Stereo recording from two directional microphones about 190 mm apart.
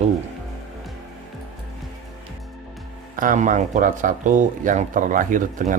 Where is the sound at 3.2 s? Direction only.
45° right (ahead or behind).